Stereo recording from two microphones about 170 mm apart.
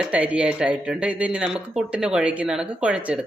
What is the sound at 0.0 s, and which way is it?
Speech, 5° right (ahead or behind).